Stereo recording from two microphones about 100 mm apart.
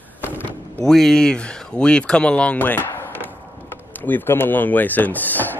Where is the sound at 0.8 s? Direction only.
5° left (ahead or behind).